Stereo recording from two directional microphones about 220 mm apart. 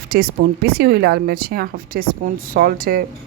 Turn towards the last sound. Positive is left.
turn(degrees=-40)  # may be behind; listen again after turning